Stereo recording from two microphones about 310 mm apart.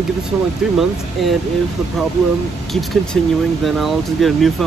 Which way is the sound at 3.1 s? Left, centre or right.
Centre.